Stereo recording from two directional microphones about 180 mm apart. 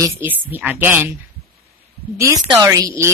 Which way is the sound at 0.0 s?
10° right (ahead or behind).